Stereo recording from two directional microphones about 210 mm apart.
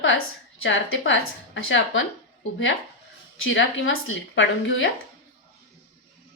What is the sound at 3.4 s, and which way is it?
A woman's voice, 65° left (ahead or behind).